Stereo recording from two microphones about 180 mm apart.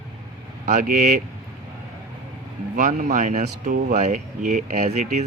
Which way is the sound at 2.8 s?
45° right (ahead or behind).